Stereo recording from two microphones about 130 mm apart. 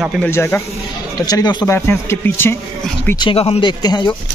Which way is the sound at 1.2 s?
30° left (ahead or behind).